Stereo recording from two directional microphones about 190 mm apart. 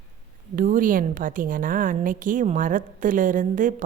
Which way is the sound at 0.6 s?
45° right (ahead or behind).